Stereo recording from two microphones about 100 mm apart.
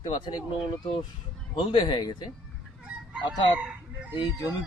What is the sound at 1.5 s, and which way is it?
Speech, 55° left (ahead or behind).